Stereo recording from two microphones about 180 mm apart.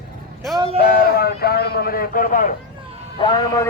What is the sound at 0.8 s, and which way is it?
Speech, 60° left (ahead or behind).